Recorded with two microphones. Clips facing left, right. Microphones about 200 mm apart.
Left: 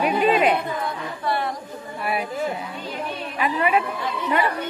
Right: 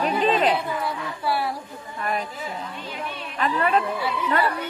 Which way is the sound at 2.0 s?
10° left (ahead or behind).